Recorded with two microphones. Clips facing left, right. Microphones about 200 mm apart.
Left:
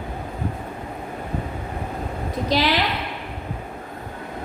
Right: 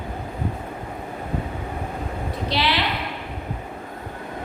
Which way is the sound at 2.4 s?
40° left (ahead or behind).